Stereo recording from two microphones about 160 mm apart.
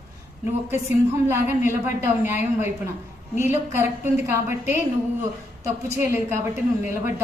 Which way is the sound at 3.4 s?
15° right (ahead or behind).